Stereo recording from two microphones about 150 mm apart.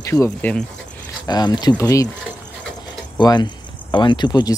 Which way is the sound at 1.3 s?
25° left (ahead or behind).